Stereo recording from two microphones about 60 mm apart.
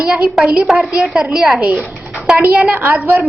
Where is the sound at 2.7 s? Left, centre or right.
Right.